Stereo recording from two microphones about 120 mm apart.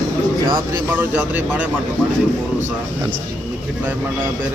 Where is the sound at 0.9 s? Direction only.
15° right (ahead or behind).